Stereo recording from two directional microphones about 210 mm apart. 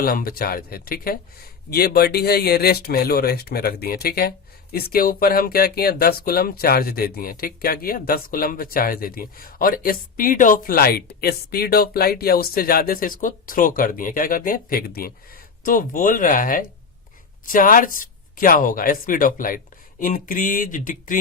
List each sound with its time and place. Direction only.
0.0 s speech: 45° left (ahead or behind)